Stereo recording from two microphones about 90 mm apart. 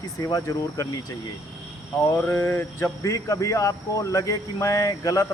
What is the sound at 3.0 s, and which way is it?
Speech, 40° left (ahead or behind).